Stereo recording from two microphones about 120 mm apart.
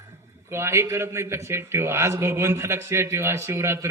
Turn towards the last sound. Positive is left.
turn(degrees=-20)  # may be behind; listen again after turning